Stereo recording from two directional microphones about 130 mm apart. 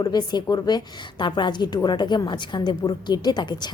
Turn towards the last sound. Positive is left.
turn(degrees=35)  # may be behind; listen again after turning